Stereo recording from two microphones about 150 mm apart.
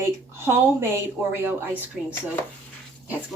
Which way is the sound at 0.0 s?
15° right (ahead or behind).